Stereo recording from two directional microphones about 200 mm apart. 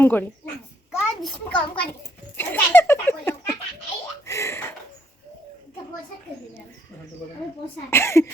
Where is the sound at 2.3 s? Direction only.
10° left (ahead or behind).